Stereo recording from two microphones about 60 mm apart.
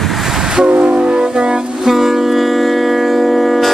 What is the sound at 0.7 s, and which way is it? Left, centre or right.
Music, centre.